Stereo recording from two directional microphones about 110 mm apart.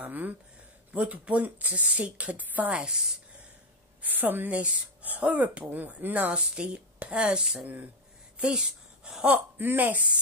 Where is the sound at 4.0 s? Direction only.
15° right (ahead or behind).